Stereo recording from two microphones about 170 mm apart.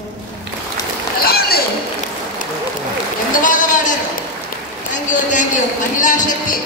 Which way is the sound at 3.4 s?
50° left (ahead or behind).